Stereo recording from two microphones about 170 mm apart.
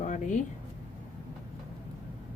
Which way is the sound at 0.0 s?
45° left (ahead or behind).